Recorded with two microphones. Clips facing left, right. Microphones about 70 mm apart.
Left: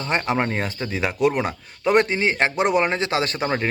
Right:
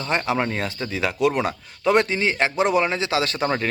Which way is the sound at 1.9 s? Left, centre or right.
Left.